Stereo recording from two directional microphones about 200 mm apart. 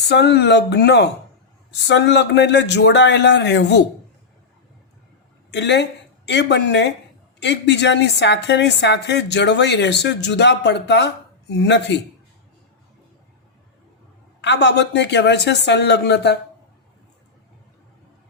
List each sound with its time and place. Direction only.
0.1 s a woman's voice: 55° left (ahead or behind)
5.5 s a woman's voice: 60° left (ahead or behind)
14.4 s a woman's voice: 60° left (ahead or behind)